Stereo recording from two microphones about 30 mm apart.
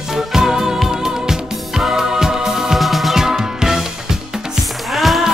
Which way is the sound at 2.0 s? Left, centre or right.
Centre.